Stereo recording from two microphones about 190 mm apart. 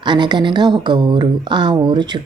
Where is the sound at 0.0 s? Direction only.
25° right (ahead or behind).